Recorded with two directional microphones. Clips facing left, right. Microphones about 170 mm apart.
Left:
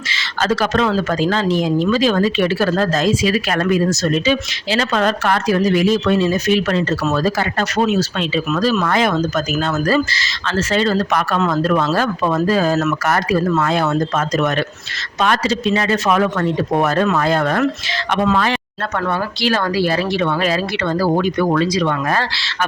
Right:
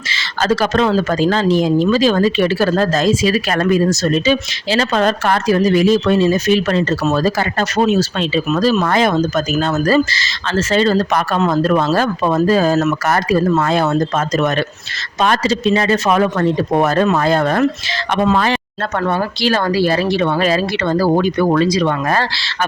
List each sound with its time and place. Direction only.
0.1 s speech: 35° right (ahead or behind)